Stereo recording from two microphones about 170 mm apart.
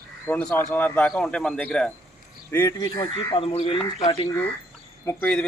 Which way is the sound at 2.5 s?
15° left (ahead or behind).